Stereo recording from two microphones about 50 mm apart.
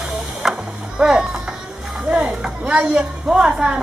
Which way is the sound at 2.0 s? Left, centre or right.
Centre.